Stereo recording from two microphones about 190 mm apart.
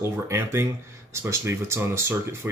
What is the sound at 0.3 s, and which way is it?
Speech, 15° right (ahead or behind).